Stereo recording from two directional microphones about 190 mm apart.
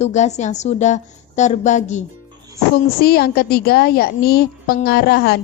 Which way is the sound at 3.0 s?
55° left (ahead or behind).